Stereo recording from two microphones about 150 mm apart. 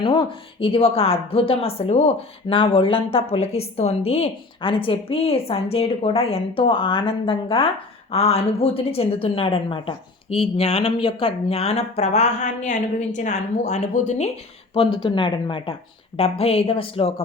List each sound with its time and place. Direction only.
0.0 s a woman's voice: 35° left (ahead or behind)
14.7 s a woman's voice: 35° left (ahead or behind)